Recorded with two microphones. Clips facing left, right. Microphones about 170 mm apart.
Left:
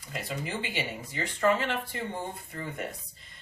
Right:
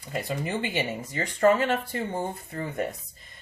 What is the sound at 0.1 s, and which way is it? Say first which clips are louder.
Speech: right 5 dB; 45° right (ahead or behind).